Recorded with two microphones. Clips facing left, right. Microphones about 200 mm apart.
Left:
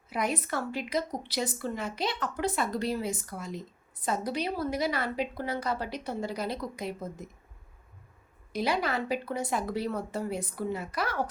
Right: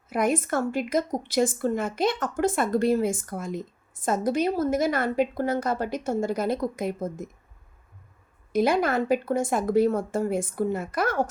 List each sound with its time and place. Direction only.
0.1 s a woman's voice: 50° right (ahead or behind)
8.5 s a woman's voice: 50° right (ahead or behind)